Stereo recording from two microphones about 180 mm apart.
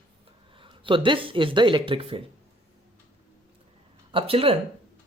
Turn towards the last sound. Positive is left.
turn(degrees=-30)  # may be behind; listen again after turning